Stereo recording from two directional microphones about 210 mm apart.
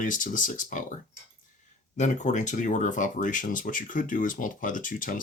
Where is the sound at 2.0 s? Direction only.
35° left (ahead or behind).